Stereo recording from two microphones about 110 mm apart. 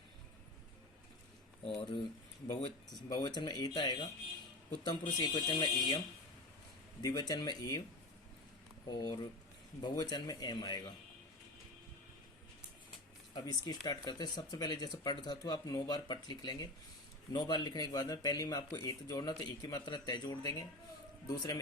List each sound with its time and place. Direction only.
3.1 s speech: 35° left (ahead or behind)
7.0 s speech: 35° left (ahead or behind)
8.9 s speech: 35° left (ahead or behind)
13.3 s speech: 35° left (ahead or behind)